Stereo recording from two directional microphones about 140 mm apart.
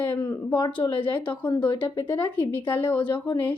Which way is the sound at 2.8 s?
10° left (ahead or behind).